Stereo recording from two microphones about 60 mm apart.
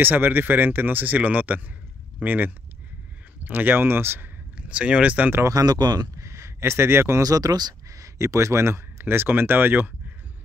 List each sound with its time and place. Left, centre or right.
0.0 s speech: right
4.6 s speech: centre
5.4 s speech: right
6.2 s a sound: right
7.2 s speech: right